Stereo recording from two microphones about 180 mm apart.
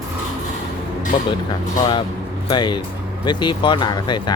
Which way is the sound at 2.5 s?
25° left (ahead or behind).